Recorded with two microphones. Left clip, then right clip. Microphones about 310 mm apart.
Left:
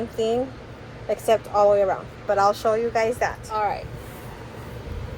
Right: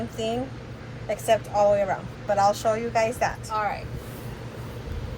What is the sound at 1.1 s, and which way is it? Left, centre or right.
Speech, centre.